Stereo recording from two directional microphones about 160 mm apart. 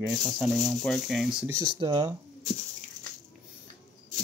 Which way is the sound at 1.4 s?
15° right (ahead or behind).